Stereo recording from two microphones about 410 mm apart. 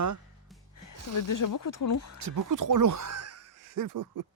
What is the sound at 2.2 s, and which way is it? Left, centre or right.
Speech, right.